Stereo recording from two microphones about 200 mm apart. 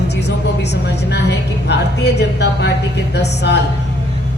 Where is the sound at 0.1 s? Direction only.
60° left (ahead or behind).